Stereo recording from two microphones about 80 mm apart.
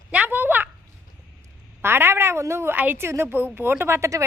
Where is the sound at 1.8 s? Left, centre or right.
Right.